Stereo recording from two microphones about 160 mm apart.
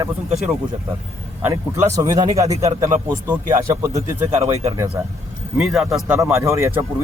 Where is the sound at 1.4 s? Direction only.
20° right (ahead or behind).